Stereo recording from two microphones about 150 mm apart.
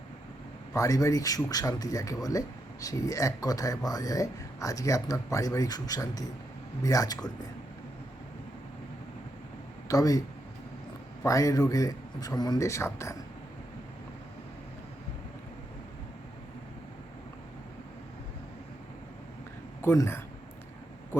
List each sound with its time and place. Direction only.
0.7 s speech: 20° left (ahead or behind)
9.9 s speech: 25° left (ahead or behind)
19.8 s speech: 15° left (ahead or behind)